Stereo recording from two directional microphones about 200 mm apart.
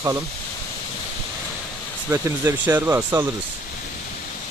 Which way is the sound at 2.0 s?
10° right (ahead or behind).